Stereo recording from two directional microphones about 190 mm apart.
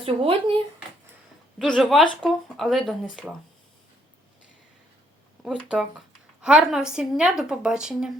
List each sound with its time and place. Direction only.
0.0 s speech: 30° right (ahead or behind)
1.5 s a woman's voice: centre (ahead or behind)
5.4 s a woman's voice: centre (ahead or behind)